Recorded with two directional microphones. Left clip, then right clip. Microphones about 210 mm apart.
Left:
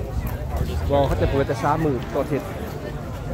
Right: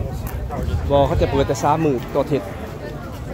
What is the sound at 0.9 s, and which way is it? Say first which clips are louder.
Speech: right 4 dB; 20° right (ahead or behind).